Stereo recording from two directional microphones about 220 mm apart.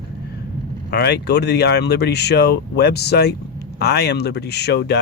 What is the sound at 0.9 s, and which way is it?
Speech, 50° left (ahead or behind).